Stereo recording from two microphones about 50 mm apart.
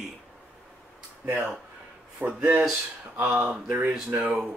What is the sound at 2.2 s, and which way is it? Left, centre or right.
Speech, right.